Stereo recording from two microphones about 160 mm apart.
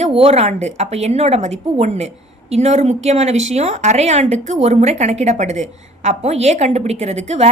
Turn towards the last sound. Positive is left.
turn(degrees=-40)  # may be behind; listen again after turning